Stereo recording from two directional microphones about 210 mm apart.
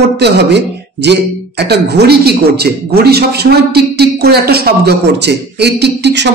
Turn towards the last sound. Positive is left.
turn(degrees=-55)  # may be behind; listen again after turning